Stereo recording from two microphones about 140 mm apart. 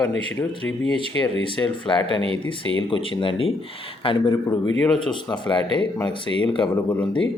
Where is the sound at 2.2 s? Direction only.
40° right (ahead or behind).